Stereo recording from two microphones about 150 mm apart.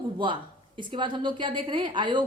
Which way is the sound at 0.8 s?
30° right (ahead or behind).